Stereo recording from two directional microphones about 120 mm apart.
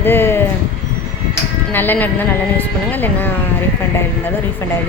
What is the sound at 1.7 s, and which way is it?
A woman's voice, 15° left (ahead or behind).